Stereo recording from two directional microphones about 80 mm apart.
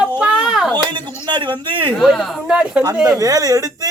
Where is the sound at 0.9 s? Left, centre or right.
Right.